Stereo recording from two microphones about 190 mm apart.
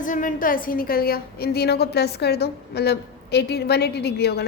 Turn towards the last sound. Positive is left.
turn(degrees=60)  # may be behind; listen again after turning